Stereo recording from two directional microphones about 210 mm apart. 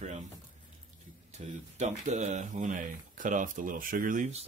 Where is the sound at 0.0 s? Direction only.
35° right (ahead or behind).